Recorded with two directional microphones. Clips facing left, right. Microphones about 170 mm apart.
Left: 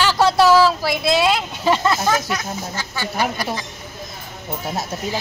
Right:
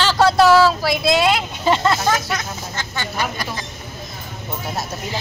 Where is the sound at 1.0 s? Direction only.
15° right (ahead or behind).